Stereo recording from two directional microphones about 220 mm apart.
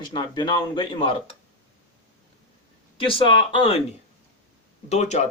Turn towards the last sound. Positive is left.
turn(degrees=30)  # may be behind; listen again after turning